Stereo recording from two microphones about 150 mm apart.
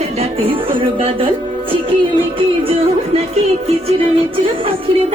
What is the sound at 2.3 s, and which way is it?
Music, 40° right (ahead or behind).